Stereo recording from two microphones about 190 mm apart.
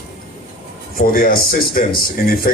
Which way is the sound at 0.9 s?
50° left (ahead or behind).